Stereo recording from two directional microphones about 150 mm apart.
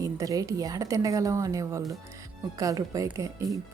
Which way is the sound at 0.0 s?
20° right (ahead or behind).